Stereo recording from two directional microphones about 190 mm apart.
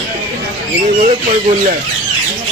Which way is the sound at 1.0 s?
40° right (ahead or behind).